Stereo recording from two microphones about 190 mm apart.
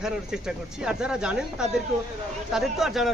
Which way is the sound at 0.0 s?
5° right (ahead or behind).